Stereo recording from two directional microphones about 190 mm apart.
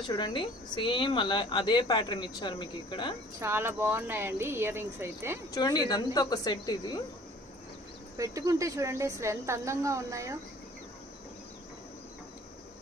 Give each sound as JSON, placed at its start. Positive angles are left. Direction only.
{"t": 0.1, "sound": "a woman's voice", "side_deg": 25}
{"t": 3.3, "sound": "a woman's voice", "side_deg": -15}
{"t": 5.5, "sound": "a woman's voice", "side_deg": 20}
{"t": 8.2, "sound": "a woman's voice", "side_deg": -15}